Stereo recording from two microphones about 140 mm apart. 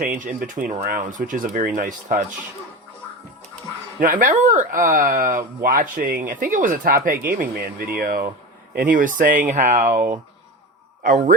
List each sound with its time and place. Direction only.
0.1 s speech: 70° right (ahead or behind)
4.0 s speech: 70° right (ahead or behind)
9.5 s speech: 60° right (ahead or behind)
11.0 s speech: 75° right (ahead or behind)